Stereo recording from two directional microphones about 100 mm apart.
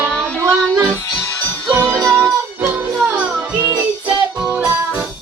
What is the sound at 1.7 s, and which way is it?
Music, 25° right (ahead or behind).